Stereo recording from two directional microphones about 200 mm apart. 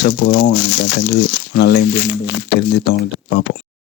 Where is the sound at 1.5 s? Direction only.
55° left (ahead or behind).